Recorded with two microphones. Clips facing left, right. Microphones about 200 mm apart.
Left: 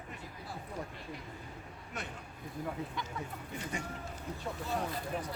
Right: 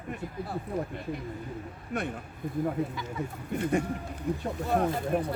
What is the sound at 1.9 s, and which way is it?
Speech, 55° right (ahead or behind).